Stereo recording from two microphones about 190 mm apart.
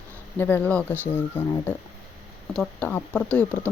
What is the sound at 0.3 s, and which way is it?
Speech, 10° left (ahead or behind).